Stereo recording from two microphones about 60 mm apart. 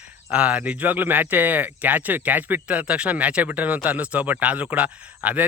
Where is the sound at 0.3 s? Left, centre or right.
Right.